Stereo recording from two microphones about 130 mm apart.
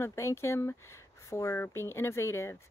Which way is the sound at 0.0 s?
20° left (ahead or behind).